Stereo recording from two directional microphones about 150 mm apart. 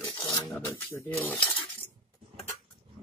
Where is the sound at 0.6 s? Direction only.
15° left (ahead or behind).